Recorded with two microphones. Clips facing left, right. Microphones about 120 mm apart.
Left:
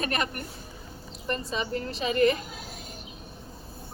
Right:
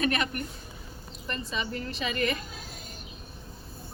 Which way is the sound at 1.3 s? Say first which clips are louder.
Left 4 dB; 35° left (ahead or behind).